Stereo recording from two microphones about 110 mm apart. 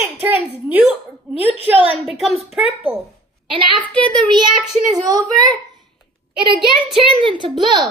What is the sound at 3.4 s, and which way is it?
A child's voice, 50° right (ahead or behind).